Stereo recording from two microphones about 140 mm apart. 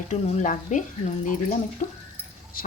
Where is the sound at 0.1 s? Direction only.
55° left (ahead or behind).